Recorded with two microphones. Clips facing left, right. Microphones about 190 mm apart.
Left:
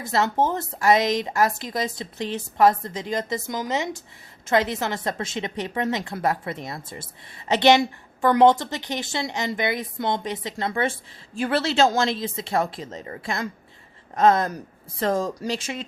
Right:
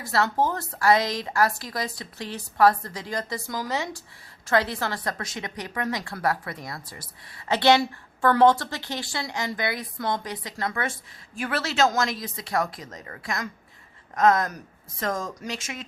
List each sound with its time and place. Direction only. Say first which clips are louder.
0.0 s a woman's voice: left 2 dB; 20° left (ahead or behind)